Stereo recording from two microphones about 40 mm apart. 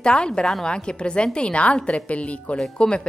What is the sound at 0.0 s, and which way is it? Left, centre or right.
A woman's voice, left.